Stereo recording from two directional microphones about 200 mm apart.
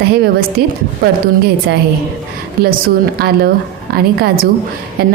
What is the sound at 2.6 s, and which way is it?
A woman's voice, 50° right (ahead or behind).